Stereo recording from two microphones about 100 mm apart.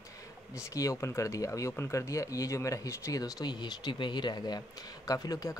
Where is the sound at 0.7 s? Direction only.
30° left (ahead or behind).